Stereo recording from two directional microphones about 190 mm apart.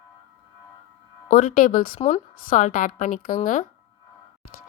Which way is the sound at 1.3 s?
50° left (ahead or behind).